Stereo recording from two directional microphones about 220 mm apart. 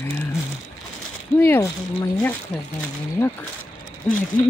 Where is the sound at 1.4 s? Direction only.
10° left (ahead or behind).